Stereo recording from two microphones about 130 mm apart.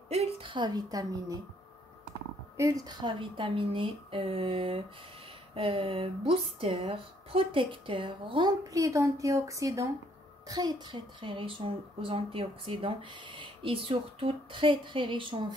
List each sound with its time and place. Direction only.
0.1 s a woman's voice: 50° right (ahead or behind); by 1.4 s 30° right (ahead or behind)
2.5 s a woman's voice: 25° right (ahead or behind)